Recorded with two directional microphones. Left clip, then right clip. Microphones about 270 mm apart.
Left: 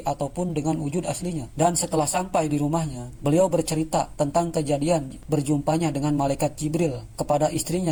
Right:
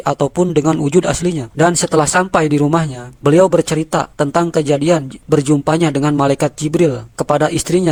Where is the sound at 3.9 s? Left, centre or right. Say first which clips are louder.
Right 7 dB; right.